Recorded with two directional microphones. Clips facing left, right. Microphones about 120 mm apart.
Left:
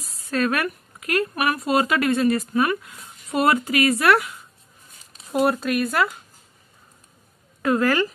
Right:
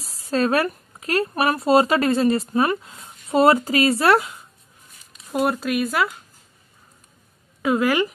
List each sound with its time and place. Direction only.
0.0 s speech: 30° right (ahead or behind)
5.3 s speech: centre (ahead or behind)
7.6 s speech: 5° right (ahead or behind)